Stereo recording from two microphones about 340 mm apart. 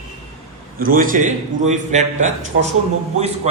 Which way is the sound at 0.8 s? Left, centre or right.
Right.